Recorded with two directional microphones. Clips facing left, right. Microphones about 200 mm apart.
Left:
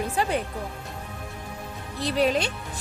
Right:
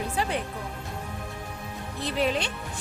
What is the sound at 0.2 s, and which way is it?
Speech, 45° left (ahead or behind).